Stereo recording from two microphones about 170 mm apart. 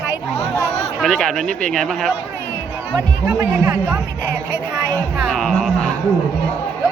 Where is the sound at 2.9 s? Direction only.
15° right (ahead or behind).